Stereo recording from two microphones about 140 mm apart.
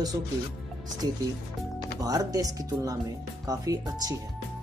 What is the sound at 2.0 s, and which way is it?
Speech, 25° right (ahead or behind).